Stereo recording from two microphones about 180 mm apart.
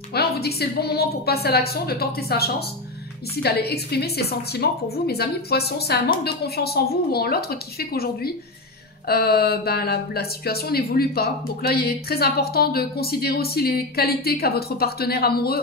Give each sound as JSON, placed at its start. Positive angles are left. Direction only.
{"t": 0.1, "sound": "speech", "side_deg": 60}